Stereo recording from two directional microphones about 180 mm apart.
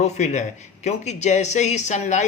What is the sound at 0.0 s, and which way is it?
Speech, 40° left (ahead or behind).